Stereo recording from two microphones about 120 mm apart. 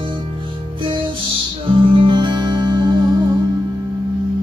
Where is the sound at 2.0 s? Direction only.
45° right (ahead or behind).